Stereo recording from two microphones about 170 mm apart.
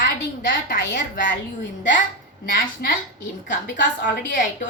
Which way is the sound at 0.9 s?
50° left (ahead or behind).